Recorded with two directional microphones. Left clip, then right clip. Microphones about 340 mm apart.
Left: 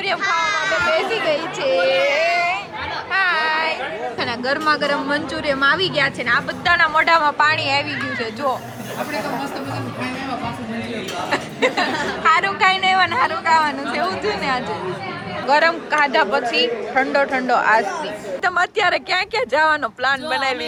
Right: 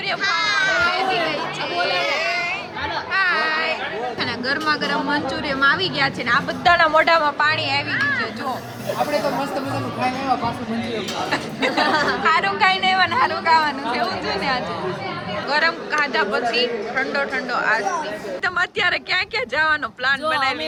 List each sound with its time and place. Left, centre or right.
0.2 s chatter: centre
0.9 s speech: centre
2.0 s a sound: centre
4.2 s a woman's voice: centre
11.3 s a woman's voice: centre